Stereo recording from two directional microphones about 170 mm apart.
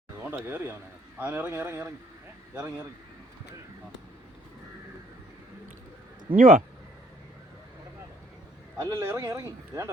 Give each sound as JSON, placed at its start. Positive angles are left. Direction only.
{"t": 0.3, "sound": "speech", "side_deg": -15}
{"t": 6.3, "sound": "speech", "side_deg": -55}
{"t": 8.8, "sound": "speech", "side_deg": -15}